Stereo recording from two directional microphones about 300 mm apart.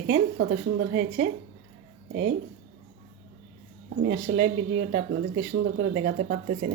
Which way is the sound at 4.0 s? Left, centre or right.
Right.